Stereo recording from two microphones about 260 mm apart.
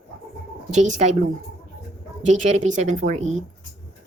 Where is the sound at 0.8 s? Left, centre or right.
Right.